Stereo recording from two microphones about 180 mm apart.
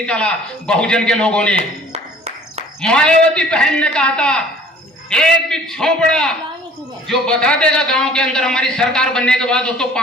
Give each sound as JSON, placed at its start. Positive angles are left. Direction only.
{"t": 0.0, "sound": "a man's voice", "side_deg": 5}
{"t": 1.5, "sound": "a sound", "side_deg": -35}
{"t": 2.8, "sound": "a man's voice", "side_deg": 5}